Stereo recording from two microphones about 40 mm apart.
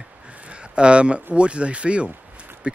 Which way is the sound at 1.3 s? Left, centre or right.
Right.